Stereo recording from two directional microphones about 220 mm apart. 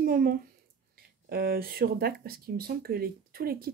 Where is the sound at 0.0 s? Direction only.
40° right (ahead or behind).